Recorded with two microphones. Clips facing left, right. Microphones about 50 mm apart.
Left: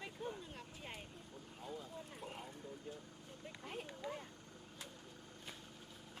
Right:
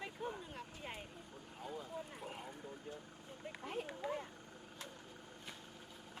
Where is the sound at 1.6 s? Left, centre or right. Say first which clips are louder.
Right 3 dB; centre.